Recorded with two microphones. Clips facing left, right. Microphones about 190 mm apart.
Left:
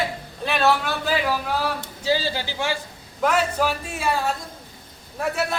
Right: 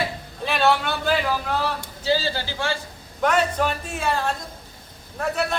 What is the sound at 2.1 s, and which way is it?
A man's voice, 15° left (ahead or behind).